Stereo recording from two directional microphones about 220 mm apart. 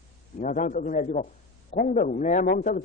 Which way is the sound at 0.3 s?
35° left (ahead or behind).